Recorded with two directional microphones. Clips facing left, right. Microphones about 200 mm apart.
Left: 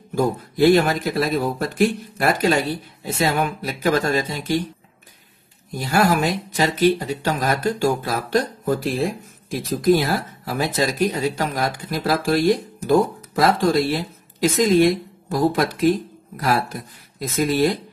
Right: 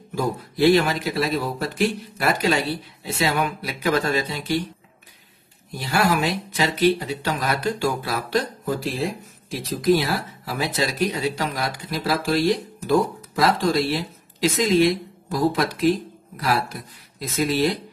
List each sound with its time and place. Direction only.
0.1 s speech: 50° left (ahead or behind)
5.7 s speech: 45° left (ahead or behind)